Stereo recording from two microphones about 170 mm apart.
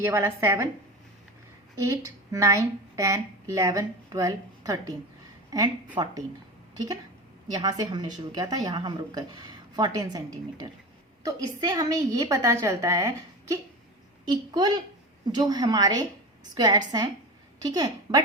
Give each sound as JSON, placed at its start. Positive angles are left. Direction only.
{"t": 0.0, "sound": "a woman's voice", "side_deg": -15}
{"t": 1.7, "sound": "a woman's voice", "side_deg": -15}